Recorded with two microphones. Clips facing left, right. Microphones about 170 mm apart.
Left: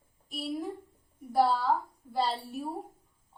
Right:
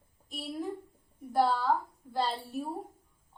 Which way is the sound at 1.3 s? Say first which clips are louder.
Left 1 dB; 5° left (ahead or behind).